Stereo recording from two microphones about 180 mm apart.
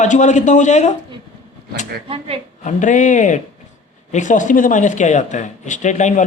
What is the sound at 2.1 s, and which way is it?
Speech, 30° right (ahead or behind).